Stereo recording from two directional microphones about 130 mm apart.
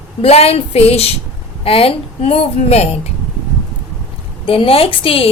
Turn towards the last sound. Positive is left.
turn(degrees=45)  # may be behind; listen again after turning